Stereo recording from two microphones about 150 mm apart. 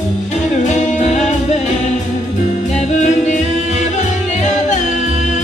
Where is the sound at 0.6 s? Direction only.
50° left (ahead or behind).